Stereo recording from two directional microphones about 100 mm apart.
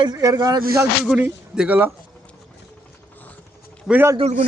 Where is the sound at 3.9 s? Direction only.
5° right (ahead or behind).